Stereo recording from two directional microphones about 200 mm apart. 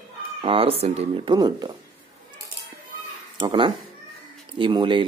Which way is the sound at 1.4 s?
20° right (ahead or behind).